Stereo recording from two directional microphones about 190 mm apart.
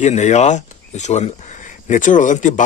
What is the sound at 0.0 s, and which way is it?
Speech, 35° left (ahead or behind).